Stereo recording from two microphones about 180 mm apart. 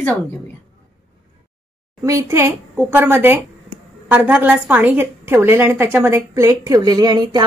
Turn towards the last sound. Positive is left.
turn(degrees=-25)  # may be behind; listen again after turning